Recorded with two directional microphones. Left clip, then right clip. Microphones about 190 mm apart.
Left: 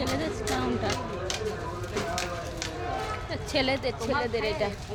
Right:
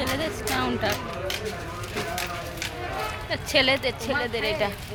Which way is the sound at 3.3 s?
5° right (ahead or behind).